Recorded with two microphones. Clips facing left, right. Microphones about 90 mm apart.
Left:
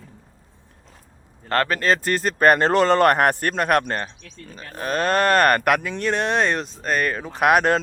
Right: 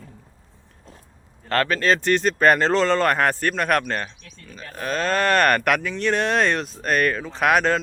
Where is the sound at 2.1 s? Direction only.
40° left (ahead or behind).